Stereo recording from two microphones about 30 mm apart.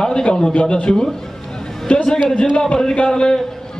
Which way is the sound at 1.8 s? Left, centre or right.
Left.